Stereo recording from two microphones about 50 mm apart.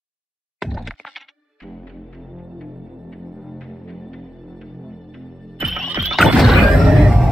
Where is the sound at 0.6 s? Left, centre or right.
Centre.